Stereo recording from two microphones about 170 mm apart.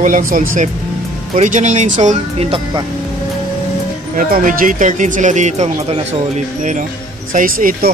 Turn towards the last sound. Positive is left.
turn(degrees=-55)  # may be behind; listen again after turning